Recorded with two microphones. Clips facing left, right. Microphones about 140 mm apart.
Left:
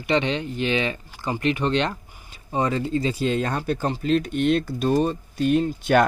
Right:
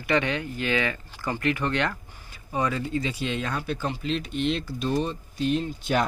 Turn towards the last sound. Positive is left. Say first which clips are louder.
# left 6 dB
turn(degrees=55)  # may be behind; listen again after turning